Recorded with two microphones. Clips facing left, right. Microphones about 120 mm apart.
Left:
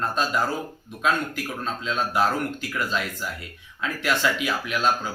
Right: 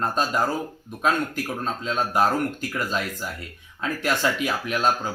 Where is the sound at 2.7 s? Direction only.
40° right (ahead or behind).